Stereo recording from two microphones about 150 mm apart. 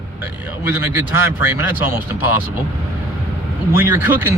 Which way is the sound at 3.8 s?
15° right (ahead or behind).